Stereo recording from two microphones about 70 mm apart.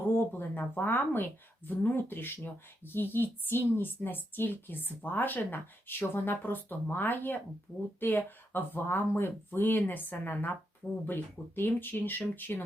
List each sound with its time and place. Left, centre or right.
0.2 s speech: left